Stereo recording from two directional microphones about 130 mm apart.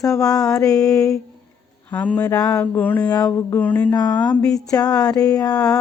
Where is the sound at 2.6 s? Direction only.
15° left (ahead or behind).